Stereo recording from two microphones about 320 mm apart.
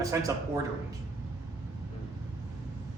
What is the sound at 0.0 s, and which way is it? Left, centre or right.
Speech, centre.